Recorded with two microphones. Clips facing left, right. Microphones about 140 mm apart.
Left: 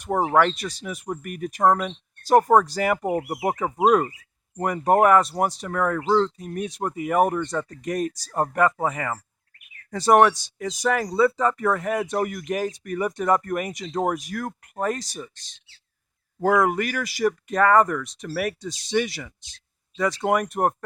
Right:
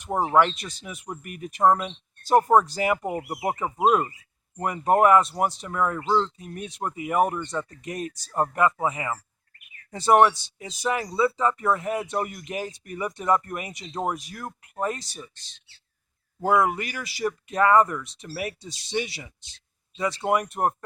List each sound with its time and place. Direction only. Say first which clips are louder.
0.0 s speech: left 1 dB; 50° left (ahead or behind)
4.6 s speech: left 1 dB; 40° left (ahead or behind)
16.6 s speech: left 2 dB; 50° left (ahead or behind)
18.9 s speech: left 5 dB; 45° left (ahead or behind)